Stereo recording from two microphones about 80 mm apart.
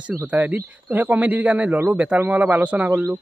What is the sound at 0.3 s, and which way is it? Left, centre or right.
Speech, right.